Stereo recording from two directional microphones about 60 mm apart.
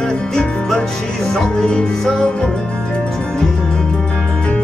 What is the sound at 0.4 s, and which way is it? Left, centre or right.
Music, centre.